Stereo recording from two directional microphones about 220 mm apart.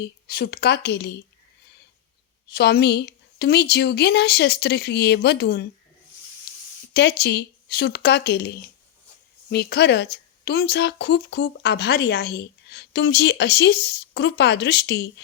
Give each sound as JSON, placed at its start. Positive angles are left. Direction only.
{"t": 0.3, "sound": "speech", "side_deg": 45}
{"t": 2.5, "sound": "speech", "side_deg": 45}
{"t": 6.9, "sound": "speech", "side_deg": 50}